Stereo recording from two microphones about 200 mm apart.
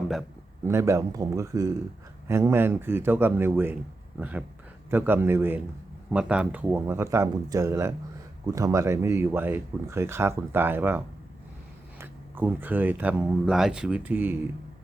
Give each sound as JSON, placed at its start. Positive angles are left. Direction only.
{"t": 0.6, "sound": "speech", "side_deg": -15}